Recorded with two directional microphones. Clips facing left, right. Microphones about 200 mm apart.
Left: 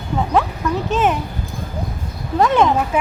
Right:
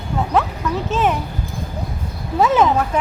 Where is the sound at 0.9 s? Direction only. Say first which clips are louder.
Left 1 dB; centre (ahead or behind).